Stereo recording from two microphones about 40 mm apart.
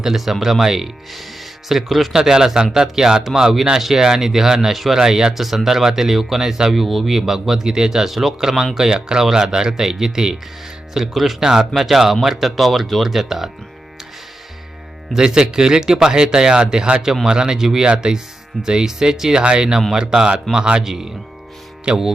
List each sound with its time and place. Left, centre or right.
0.0 s speech: centre
15.1 s speech: centre
19.4 s speech: right
19.9 s speech: centre
21.9 s speech: right